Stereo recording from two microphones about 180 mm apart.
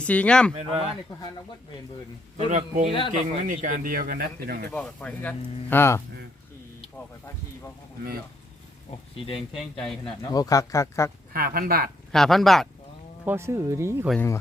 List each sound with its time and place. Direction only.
0.0 s speech: 5° left (ahead or behind)
0.5 s a man's voice: 30° right (ahead or behind)
2.5 s a man's voice: 40° right (ahead or behind)
2.9 s a man's voice: 30° left (ahead or behind)
3.4 s speech: 45° right (ahead or behind)
4.7 s speech: 5° left (ahead or behind)
9.1 s speech: 30° left (ahead or behind)
9.5 s speech: centre (ahead or behind)
10.0 s speech: 20° left (ahead or behind)
11.3 s speech: 55° right (ahead or behind)
12.1 s speech: centre (ahead or behind)
13.2 s speech: 15° right (ahead or behind)